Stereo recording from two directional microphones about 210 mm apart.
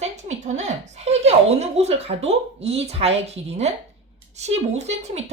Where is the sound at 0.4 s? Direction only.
35° right (ahead or behind).